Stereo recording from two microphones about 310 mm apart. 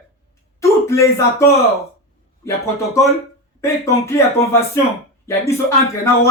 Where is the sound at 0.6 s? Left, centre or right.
Centre.